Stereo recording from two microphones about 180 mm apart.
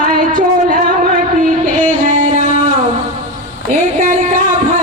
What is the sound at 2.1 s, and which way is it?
Guitar, 40° right (ahead or behind).